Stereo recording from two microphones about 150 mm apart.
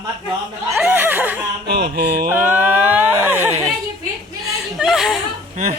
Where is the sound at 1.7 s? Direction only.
90° right.